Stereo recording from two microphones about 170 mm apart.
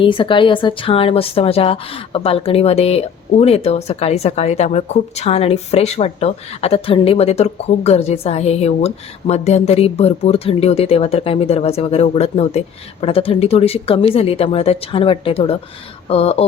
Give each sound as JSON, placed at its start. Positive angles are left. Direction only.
{"t": 0.0, "sound": "speech", "side_deg": 30}